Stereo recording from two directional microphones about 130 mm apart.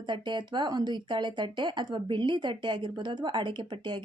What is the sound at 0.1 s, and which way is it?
Speech, 35° right (ahead or behind).